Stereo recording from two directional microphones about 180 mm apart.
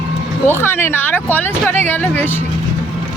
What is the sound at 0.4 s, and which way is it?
Speech, 10° left (ahead or behind).